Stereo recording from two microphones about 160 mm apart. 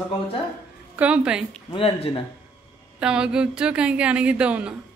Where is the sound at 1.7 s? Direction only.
35° left (ahead or behind).